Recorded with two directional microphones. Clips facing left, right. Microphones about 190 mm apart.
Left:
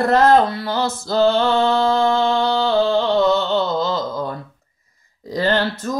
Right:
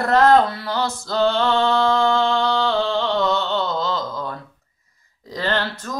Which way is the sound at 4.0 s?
25° left (ahead or behind).